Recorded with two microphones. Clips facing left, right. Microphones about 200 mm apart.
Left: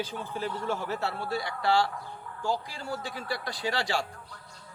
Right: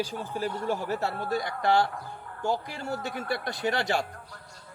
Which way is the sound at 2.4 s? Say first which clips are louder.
Right 2 dB; 20° right (ahead or behind).